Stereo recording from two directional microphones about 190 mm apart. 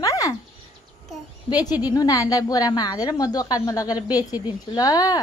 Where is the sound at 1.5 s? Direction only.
20° left (ahead or behind).